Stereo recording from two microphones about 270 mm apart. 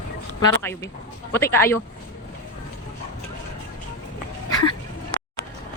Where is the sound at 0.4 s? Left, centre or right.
Centre.